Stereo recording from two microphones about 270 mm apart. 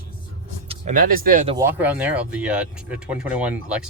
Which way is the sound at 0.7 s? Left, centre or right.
Right.